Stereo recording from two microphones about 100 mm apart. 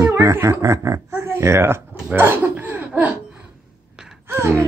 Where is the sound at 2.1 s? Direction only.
20° right (ahead or behind).